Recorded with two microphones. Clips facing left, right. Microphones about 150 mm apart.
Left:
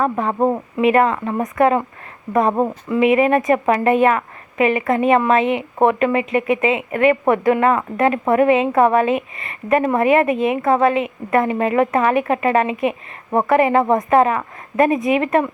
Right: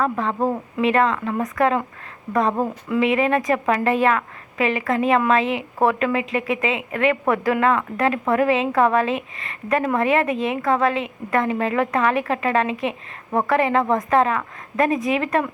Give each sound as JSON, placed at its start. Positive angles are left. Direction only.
{"t": 0.3, "sound": "speech", "side_deg": 25}
{"t": 0.8, "sound": "a woman's voice", "side_deg": 5}
{"t": 2.9, "sound": "a woman's voice", "side_deg": 0}